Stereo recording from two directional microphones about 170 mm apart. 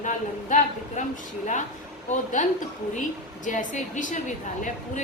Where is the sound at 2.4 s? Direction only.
45° left (ahead or behind).